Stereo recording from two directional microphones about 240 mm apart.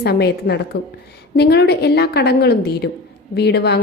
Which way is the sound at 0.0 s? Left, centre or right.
Left.